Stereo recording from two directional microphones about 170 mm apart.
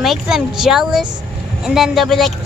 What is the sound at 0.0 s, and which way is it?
Speech, centre (ahead or behind).